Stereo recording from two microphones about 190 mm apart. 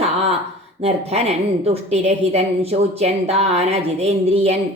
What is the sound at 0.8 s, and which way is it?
A woman's voice, 35° right (ahead or behind).